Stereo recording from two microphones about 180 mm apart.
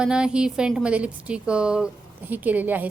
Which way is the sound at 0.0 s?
5° right (ahead or behind).